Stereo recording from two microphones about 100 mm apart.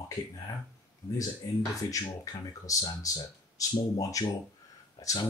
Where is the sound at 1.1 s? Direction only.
35° left (ahead or behind).